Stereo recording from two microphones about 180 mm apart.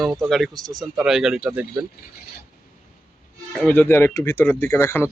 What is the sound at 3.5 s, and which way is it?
Speech, 10° left (ahead or behind).